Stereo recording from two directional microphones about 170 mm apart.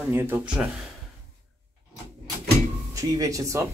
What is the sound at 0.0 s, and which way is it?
Speech, 10° right (ahead or behind).